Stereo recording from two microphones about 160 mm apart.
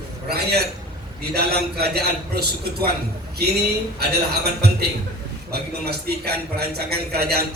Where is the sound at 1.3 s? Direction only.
85° right.